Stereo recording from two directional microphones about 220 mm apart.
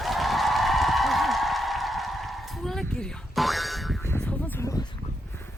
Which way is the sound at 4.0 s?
10° left (ahead or behind).